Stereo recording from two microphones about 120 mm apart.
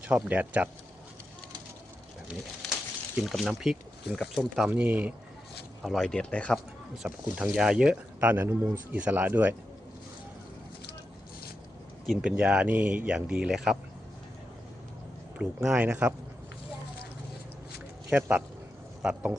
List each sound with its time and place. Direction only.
0.0 s speech: 10° right (ahead or behind)
3.2 s speech: centre (ahead or behind)
4.7 s speech: 10° right (ahead or behind)
5.8 s speech: centre (ahead or behind)
7.0 s speech: 5° right (ahead or behind)
12.0 s speech: 5° right (ahead or behind)
15.4 s speech: 10° right (ahead or behind)
18.1 s speech: 10° right (ahead or behind)